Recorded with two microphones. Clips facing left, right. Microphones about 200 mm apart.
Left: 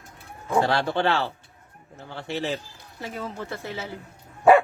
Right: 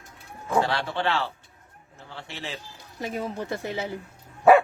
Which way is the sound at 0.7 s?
45° left (ahead or behind).